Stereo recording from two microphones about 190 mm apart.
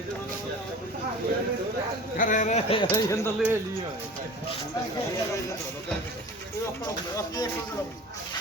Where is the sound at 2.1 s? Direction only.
45° left (ahead or behind).